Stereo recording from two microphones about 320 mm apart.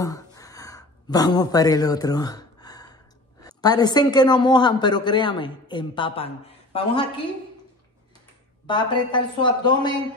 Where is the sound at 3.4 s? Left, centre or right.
Centre.